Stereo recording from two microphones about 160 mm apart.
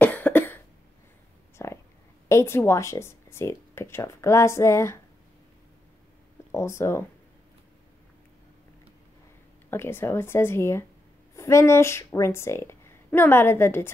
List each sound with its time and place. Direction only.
0.0 s cough: 10° left (ahead or behind)
1.6 s a sound: 15° left (ahead or behind)
2.2 s speech: 15° left (ahead or behind)
6.5 s speech: 15° left (ahead or behind)
9.7 s a woman's voice: 15° left (ahead or behind)